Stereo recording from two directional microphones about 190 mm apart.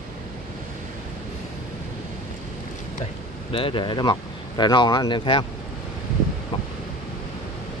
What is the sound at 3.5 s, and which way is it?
Speech, 25° left (ahead or behind).